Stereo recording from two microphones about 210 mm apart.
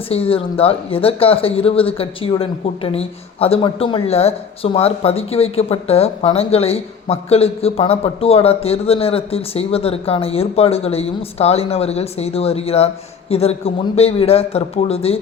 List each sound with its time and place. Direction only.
0.1 s speech: 25° left (ahead or behind)